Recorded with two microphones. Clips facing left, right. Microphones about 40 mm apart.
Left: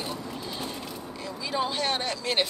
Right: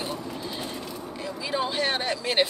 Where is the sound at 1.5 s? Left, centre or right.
Centre.